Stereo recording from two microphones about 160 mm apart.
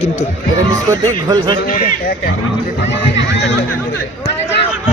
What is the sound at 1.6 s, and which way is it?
Speech, 65° left (ahead or behind).